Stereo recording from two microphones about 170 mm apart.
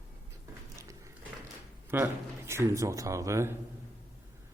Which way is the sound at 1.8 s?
15° right (ahead or behind).